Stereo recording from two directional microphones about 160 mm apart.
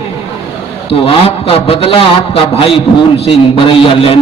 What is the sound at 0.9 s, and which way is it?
A man's voice, 35° left (ahead or behind).